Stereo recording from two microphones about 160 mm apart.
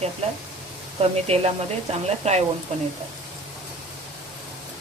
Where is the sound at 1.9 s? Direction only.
40° right (ahead or behind).